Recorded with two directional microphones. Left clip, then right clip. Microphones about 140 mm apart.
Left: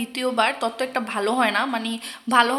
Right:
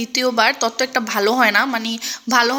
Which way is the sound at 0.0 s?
25° right (ahead or behind).